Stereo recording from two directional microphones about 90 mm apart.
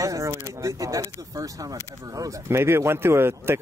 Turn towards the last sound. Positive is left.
turn(degrees=-25)  # may be behind; listen again after turning